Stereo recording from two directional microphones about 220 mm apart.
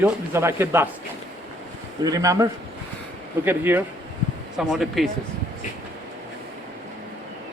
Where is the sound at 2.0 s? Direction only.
15° right (ahead or behind).